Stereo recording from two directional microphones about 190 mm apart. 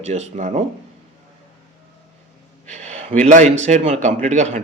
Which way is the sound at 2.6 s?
35° right (ahead or behind).